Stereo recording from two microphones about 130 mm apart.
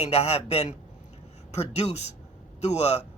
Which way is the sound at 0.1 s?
55° left (ahead or behind).